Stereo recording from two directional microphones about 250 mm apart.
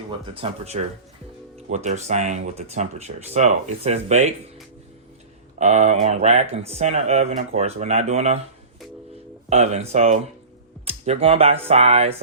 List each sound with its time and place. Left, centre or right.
0.3 s speech: right
5.5 s speech: right
9.5 s speech: right